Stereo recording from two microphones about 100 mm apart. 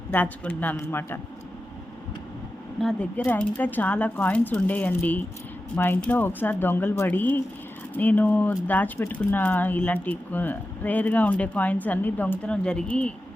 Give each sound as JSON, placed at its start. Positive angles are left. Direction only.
{"t": 0.1, "sound": "speech", "side_deg": 15}
{"t": 2.8, "sound": "speech", "side_deg": 10}